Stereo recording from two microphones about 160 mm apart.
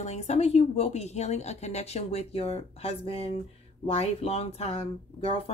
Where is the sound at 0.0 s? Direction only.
45° left (ahead or behind).